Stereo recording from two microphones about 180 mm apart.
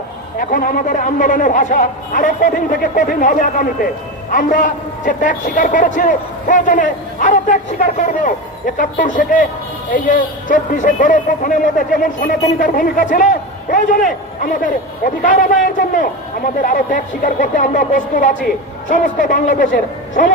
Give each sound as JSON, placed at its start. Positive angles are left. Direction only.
{"t": 0.3, "sound": "a man's voice", "side_deg": 50}